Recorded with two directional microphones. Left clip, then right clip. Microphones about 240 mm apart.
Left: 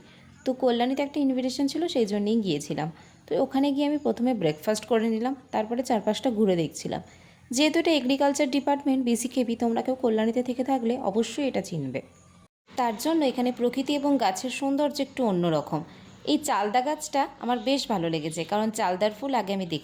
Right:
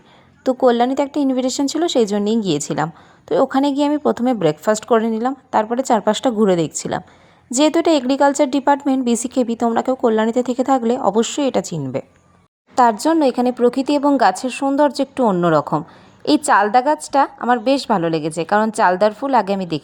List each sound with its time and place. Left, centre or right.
0.4 s a woman's voice: right